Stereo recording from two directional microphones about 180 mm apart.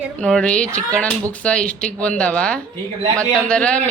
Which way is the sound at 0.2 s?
5° left (ahead or behind).